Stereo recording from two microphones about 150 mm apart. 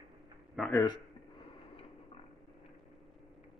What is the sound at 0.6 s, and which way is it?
Speech, centre (ahead or behind).